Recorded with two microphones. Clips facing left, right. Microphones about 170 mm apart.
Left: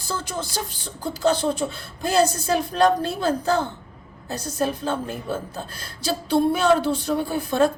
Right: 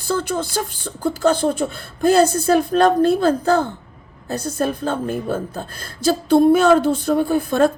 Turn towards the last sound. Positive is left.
turn(degrees=-50)  # may be behind; listen again after turning